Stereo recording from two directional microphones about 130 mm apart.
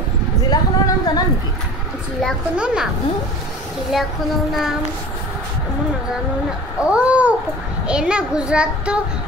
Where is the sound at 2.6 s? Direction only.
10° right (ahead or behind).